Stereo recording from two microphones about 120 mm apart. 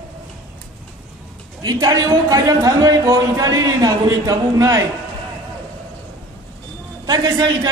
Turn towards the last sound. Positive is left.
turn(degrees=-35)  # may be behind; listen again after turning